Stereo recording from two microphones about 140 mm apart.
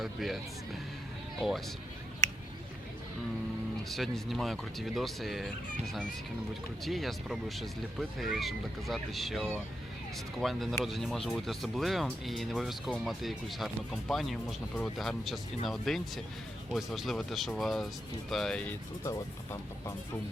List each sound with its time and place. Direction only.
0.0 s speech: centre (ahead or behind)
3.8 s speech: centre (ahead or behind)
19.0 s speech: 20° left (ahead or behind)